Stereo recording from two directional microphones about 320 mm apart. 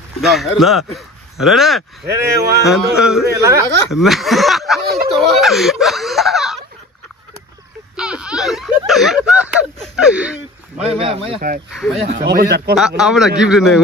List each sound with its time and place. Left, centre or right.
0.2 s speech: centre
7.9 s speech: centre
10.8 s speech: centre
11.7 s speech: centre
12.1 s speech: right
12.7 s speech: centre